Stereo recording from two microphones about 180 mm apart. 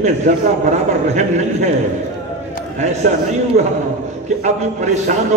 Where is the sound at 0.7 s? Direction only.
40° right (ahead or behind).